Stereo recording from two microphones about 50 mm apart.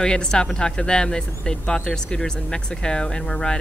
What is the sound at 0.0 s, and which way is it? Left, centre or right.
Speech, centre.